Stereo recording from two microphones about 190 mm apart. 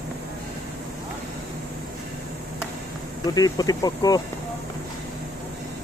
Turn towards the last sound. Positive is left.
turn(degrees=20)  # may be behind; listen again after turning